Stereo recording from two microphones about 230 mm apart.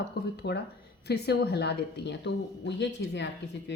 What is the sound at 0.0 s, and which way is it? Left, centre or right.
A woman's voice, left.